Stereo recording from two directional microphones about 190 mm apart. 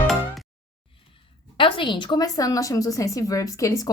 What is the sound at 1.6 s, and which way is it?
A woman's voice, 25° left (ahead or behind).